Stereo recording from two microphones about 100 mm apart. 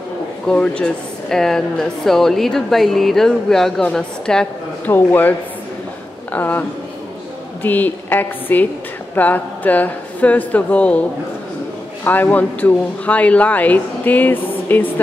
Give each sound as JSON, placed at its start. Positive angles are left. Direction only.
{"t": 0.5, "sound": "a woman's voice", "side_deg": 10}
{"t": 4.8, "sound": "a woman's voice", "side_deg": 20}
{"t": 6.3, "sound": "a woman's voice", "side_deg": 20}
{"t": 7.6, "sound": "a woman's voice", "side_deg": 20}